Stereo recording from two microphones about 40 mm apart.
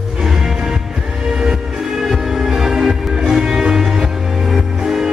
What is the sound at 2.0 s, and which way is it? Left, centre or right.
Music, centre.